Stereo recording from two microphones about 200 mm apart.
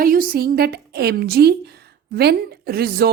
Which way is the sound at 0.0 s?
45° right (ahead or behind).